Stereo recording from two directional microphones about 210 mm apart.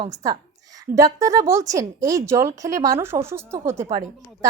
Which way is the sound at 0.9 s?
15° right (ahead or behind).